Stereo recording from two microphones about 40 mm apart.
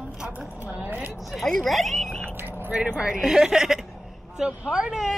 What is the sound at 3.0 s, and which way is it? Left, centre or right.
Speech, centre.